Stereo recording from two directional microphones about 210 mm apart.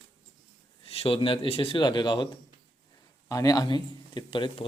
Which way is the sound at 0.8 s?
25° left (ahead or behind).